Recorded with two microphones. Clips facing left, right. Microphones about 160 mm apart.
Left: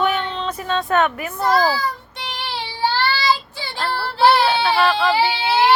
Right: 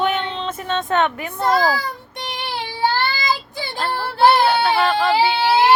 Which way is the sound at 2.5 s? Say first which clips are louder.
Right 1 dB; 50° right (ahead or behind).